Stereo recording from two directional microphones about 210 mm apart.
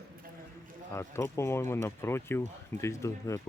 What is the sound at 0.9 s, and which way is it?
Speech, 10° left (ahead or behind).